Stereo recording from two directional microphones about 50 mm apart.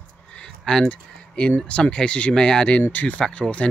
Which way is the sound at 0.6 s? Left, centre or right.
Centre.